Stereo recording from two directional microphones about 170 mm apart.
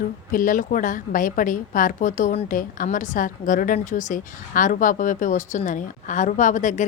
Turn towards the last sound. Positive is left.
turn(degrees=45)  # may be behind; listen again after turning